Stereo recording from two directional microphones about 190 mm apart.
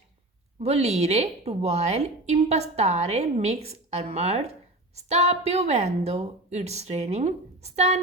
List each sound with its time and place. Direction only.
0.6 s a woman's voice: 35° right (ahead or behind)